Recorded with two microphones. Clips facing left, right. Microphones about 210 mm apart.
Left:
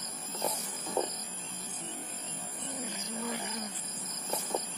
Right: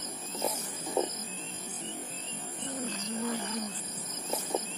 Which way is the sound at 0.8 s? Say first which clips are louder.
Right 2 dB; 20° right (ahead or behind).